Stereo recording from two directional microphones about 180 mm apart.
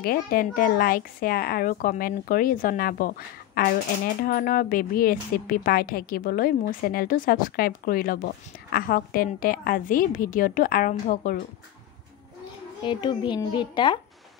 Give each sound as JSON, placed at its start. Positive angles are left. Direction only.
{"t": 0.0, "sound": "a woman's voice", "side_deg": 55}
{"t": 12.8, "sound": "a child's voice", "side_deg": 25}